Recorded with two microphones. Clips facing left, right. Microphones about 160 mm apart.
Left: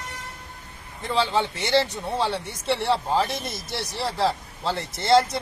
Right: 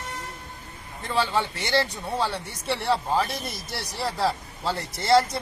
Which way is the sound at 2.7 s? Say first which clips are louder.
Left 1 dB; centre (ahead or behind).